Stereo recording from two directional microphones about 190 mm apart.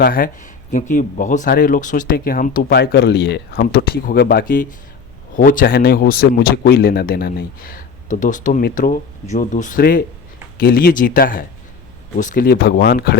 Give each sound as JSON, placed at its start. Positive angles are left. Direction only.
{"t": 0.0, "sound": "speech", "side_deg": 50}